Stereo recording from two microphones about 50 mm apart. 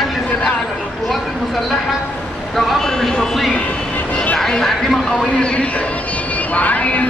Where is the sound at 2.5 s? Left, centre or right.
Centre.